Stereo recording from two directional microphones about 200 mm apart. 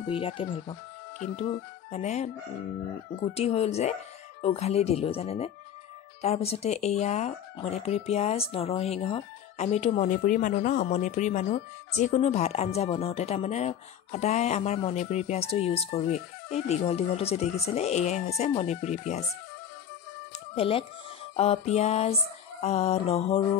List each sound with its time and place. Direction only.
0.0 s speech: 25° left (ahead or behind)
1.9 s speech: 35° left (ahead or behind)
20.5 s speech: 30° left (ahead or behind)